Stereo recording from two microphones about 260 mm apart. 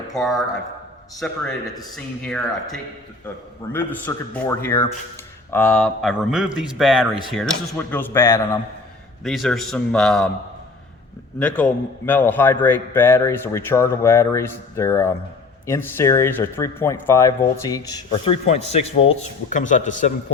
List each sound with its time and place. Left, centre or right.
0.1 s speech: centre
2.2 s speech: centre
11.3 s speech: centre
18.1 s a man's voice: left